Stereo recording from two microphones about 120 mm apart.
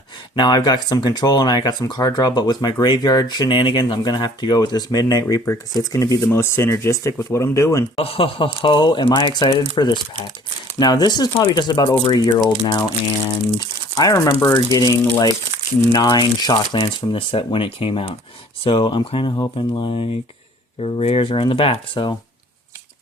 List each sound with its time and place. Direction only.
0.3 s speech: 35° left (ahead or behind)
7.9 s speech: 50° left (ahead or behind); by 14.9 s 30° left (ahead or behind)
16.0 s speech: 40° left (ahead or behind)
16.7 s speech: 50° left (ahead or behind)